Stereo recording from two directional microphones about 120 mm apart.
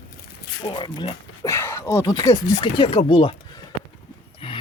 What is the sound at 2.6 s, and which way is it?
Speech, 45° left (ahead or behind).